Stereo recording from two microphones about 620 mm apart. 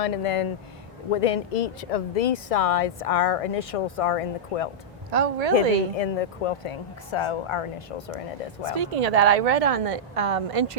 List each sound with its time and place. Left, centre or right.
0.0 s speech: left
5.1 s a woman's voice: right
5.5 s speech: left
8.6 s a woman's voice: right